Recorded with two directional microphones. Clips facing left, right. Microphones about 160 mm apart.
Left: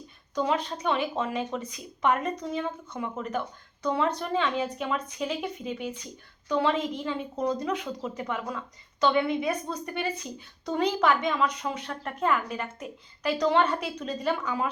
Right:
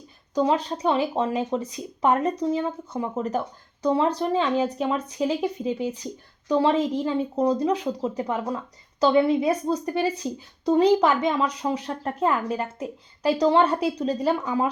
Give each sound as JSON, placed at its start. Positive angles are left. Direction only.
{"t": 0.3, "sound": "a woman's voice", "side_deg": -30}